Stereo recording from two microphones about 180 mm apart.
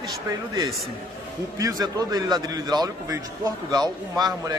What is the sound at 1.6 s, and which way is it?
A man's voice, 20° right (ahead or behind).